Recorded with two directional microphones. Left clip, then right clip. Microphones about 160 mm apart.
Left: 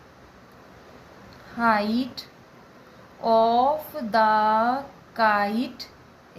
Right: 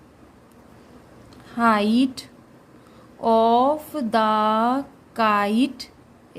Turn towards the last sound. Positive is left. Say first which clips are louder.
# right 2 dB
turn(degrees=-90)